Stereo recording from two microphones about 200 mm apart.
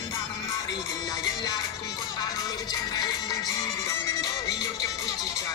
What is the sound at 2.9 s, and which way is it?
Music, 20° left (ahead or behind).